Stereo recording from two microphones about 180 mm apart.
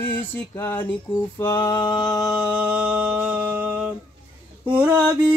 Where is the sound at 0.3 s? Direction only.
10° left (ahead or behind).